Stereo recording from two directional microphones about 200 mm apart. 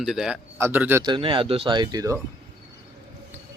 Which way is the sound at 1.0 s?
25° right (ahead or behind).